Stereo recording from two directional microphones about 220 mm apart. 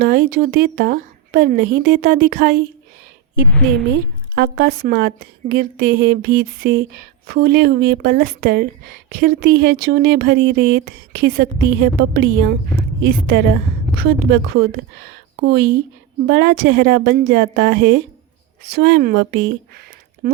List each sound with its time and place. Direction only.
0.0 s speech: 40° right (ahead or behind)
4.4 s a woman's voice: 45° right (ahead or behind)